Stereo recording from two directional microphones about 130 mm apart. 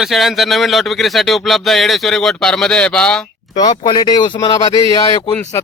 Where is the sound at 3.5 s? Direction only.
35° left (ahead or behind).